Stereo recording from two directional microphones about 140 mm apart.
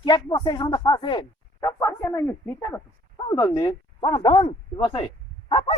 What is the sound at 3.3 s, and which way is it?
Speech, 30° left (ahead or behind).